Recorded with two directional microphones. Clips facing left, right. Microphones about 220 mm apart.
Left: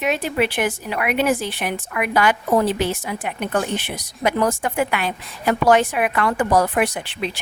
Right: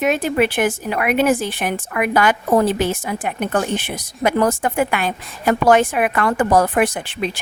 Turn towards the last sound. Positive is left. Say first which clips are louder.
# right 3 dB
turn(degrees=-50)  # may be behind; listen again after turning